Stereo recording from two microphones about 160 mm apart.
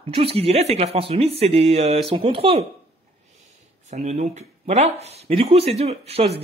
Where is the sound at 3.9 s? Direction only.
45° right (ahead or behind).